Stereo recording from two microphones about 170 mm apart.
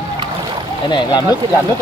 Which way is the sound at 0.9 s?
25° left (ahead or behind).